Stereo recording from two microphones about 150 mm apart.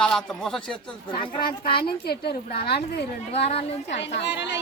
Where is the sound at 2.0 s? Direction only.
90° left.